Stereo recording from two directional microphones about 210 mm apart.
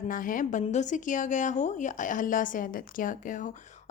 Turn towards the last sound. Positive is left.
turn(degrees=40)  # may be behind; listen again after turning